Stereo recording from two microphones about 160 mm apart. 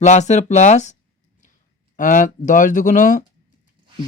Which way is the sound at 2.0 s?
55° left (ahead or behind).